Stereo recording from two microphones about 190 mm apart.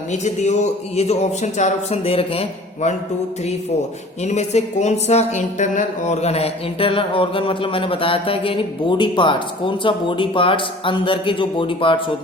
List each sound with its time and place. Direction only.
0.1 s speech: 40° left (ahead or behind)
4.2 s speech: 35° left (ahead or behind)